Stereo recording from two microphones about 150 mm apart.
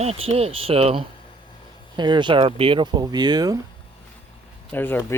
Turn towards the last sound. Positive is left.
turn(degrees=15)  # may be behind; listen again after turning